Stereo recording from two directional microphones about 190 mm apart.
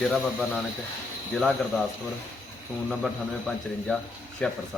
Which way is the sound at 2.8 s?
Centre (ahead or behind).